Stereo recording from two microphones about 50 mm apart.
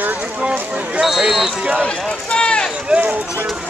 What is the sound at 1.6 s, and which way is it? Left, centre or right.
Speech, right.